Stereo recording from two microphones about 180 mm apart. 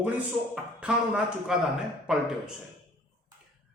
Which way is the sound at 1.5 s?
5° right (ahead or behind).